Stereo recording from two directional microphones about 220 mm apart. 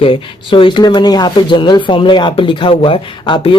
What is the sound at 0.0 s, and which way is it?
Speech, 25° left (ahead or behind).